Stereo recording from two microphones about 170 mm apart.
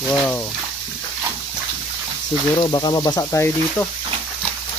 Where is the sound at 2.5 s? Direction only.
25° left (ahead or behind).